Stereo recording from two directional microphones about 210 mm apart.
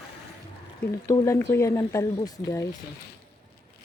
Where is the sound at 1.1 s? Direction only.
15° left (ahead or behind).